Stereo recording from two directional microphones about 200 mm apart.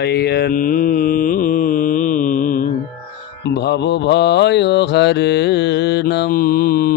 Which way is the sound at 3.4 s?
55° left (ahead or behind).